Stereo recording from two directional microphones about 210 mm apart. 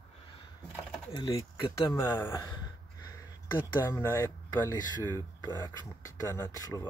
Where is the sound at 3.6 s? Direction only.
15° left (ahead or behind).